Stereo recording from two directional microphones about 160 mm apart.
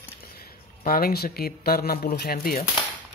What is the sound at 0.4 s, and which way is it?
Speech, 70° left (ahead or behind).